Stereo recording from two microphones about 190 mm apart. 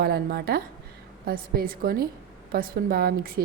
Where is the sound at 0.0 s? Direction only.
55° right (ahead or behind).